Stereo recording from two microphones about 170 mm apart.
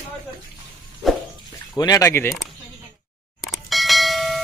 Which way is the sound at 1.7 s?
20° left (ahead or behind).